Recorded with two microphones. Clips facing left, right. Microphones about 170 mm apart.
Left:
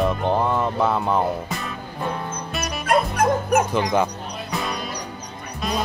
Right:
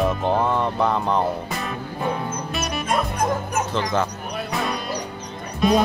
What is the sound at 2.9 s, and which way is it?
Bow-wow, 65° left (ahead or behind).